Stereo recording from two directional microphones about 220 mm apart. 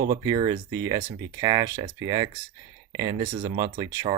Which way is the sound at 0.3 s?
15° right (ahead or behind).